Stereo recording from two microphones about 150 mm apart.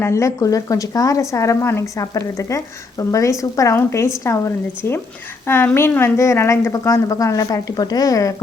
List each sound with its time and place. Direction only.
0.0 s a woman's voice: 20° left (ahead or behind)